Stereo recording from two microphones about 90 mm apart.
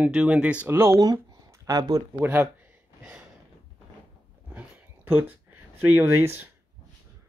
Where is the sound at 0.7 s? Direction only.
30° right (ahead or behind).